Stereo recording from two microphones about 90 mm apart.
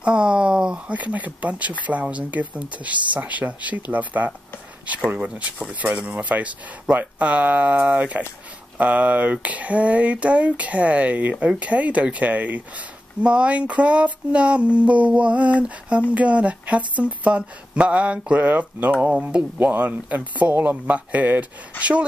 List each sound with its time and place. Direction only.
0.0 s speech: 10° right (ahead or behind)